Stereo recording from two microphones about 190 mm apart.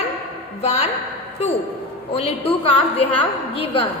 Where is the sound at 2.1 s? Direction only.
30° left (ahead or behind).